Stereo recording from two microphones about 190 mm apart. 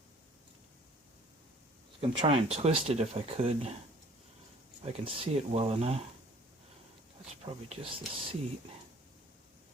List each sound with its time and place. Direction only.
2.0 s speech: 30° right (ahead or behind)
5.0 s speech: 30° right (ahead or behind)
7.7 s speech: 30° right (ahead or behind)